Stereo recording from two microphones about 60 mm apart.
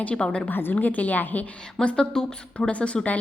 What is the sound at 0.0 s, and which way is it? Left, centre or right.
Speech, centre.